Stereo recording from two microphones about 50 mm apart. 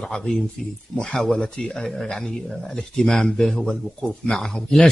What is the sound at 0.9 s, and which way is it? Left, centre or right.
Speech, centre.